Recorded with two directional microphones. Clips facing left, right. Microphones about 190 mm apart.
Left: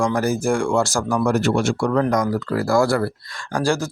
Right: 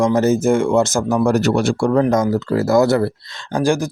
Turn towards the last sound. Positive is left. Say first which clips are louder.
# right 4 dB
turn(degrees=-15)  # may be behind; listen again after turning